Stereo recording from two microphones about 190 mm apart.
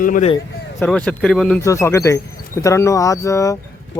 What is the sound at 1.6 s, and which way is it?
Speech, 15° left (ahead or behind).